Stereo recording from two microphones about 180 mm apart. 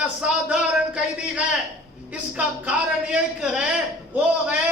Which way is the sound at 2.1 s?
10° right (ahead or behind).